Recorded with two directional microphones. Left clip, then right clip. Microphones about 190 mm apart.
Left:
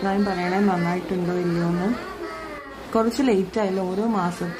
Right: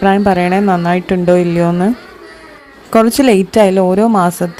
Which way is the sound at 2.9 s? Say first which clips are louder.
Right 11 dB; 45° right (ahead or behind).